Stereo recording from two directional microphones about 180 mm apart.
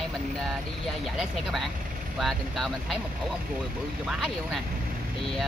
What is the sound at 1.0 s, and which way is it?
Speech, centre (ahead or behind).